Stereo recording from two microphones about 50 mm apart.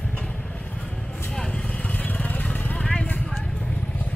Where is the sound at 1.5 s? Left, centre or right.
Left.